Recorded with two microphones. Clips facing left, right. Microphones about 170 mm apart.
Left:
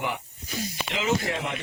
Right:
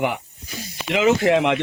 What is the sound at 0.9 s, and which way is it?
Speech, 80° right.